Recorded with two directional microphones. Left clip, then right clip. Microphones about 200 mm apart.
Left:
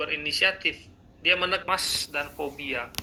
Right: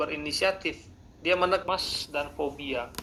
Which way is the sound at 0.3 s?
20° left (ahead or behind).